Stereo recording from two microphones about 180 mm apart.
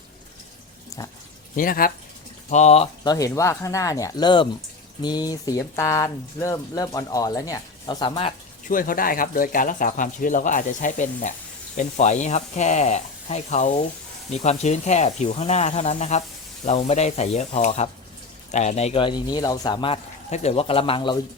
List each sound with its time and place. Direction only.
0.9 s a sound: 20° left (ahead or behind)
1.5 s speech: 50° left (ahead or behind)
2.5 s speech: 40° left (ahead or behind)
3.0 s speech: 20° left (ahead or behind)
8.6 s speech: 50° left (ahead or behind); by 21.2 s 30° left (ahead or behind)